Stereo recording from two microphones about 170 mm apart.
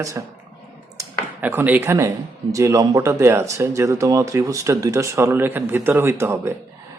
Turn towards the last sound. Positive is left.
turn(degrees=-15)  # may be behind; listen again after turning